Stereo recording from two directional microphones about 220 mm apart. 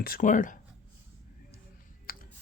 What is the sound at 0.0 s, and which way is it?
Speech, 40° left (ahead or behind).